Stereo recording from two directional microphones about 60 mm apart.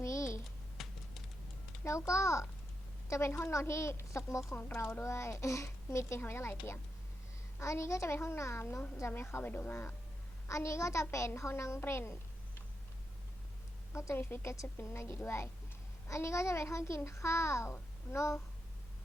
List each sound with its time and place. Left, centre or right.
0.0 s typing: left
0.8 s a sound: centre
1.8 s a woman's voice: left
4.5 s a child's voice: left
7.6 s a child's voice: left
9.4 s a woman's voice: left
10.5 s a woman's voice: left
13.9 s a child's voice: left
14.3 s a woman's voice: left